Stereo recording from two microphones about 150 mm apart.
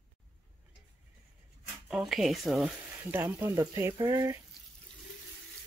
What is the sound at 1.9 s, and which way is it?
Speech, centre (ahead or behind).